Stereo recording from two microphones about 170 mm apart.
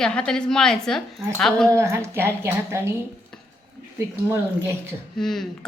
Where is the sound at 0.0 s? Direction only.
5° left (ahead or behind).